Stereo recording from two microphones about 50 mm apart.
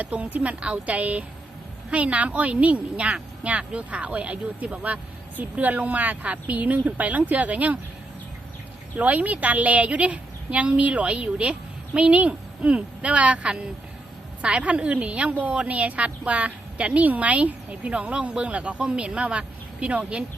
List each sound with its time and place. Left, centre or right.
0.0 s a woman's voice: right
9.0 s a woman's voice: right